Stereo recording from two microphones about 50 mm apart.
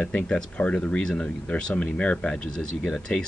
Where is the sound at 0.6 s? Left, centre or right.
Left.